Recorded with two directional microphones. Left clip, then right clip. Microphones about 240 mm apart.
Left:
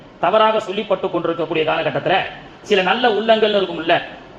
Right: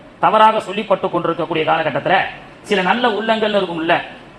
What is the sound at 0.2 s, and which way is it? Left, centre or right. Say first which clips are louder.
A man's voice: right 3 dB; right.